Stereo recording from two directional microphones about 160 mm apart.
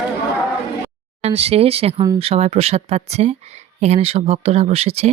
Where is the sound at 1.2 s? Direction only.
40° right (ahead or behind).